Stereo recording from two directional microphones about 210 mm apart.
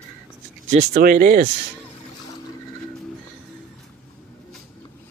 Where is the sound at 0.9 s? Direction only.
40° right (ahead or behind).